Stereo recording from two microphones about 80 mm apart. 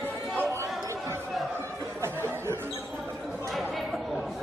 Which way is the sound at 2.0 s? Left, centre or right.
Right.